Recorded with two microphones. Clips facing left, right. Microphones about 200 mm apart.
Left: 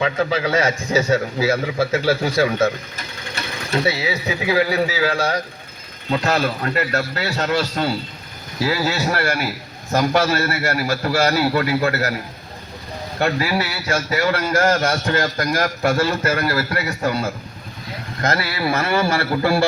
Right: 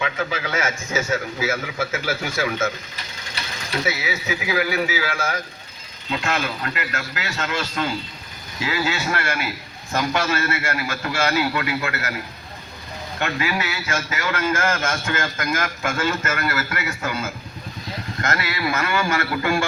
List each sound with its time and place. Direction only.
0.0 s a man's voice: 35° left (ahead or behind)
13.1 s a man's voice: 35° left (ahead or behind)